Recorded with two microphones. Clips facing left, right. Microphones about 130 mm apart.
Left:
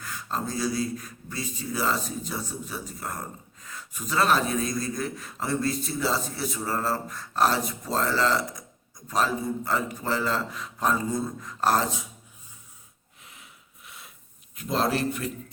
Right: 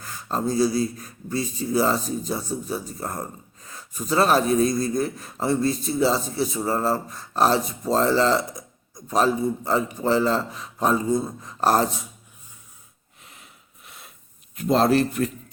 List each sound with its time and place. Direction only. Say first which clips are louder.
0.0 s a man's voice: right 5 dB; 35° right (ahead or behind)
14.6 s speech: right 7 dB; 35° right (ahead or behind)
14.8 s a man's voice: right 7 dB; 50° right (ahead or behind)